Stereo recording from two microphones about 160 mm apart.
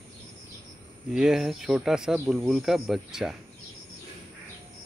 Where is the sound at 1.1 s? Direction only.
5° right (ahead or behind).